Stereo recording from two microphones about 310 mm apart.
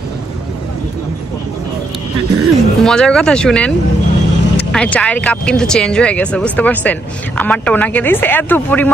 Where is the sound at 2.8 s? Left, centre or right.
Centre.